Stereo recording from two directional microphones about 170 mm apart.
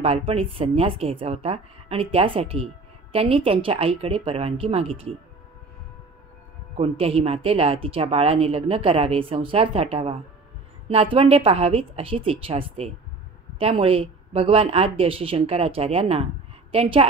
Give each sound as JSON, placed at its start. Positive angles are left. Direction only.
{"t": 0.0, "sound": "a woman's voice", "side_deg": -35}
{"t": 6.8, "sound": "a woman's voice", "side_deg": -35}